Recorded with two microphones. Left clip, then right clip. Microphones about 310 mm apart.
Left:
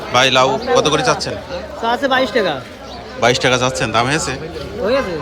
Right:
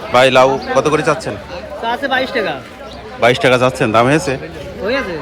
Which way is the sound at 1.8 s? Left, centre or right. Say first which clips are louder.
Left 1 dB; left.